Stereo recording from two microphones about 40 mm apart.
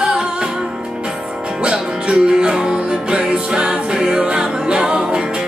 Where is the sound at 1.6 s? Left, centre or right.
Right.